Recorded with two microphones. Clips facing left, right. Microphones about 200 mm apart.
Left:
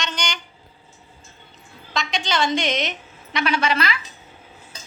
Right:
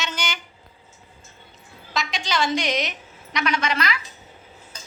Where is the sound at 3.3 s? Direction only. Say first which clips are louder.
Left 2 dB; 30° left (ahead or behind).